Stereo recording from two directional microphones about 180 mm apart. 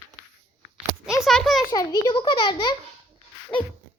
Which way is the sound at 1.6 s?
20° left (ahead or behind).